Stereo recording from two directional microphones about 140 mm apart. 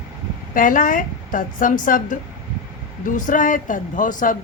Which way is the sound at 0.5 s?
70° left (ahead or behind).